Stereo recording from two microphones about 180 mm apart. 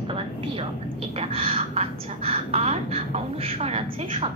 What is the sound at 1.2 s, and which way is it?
A woman's voice, 30° right (ahead or behind).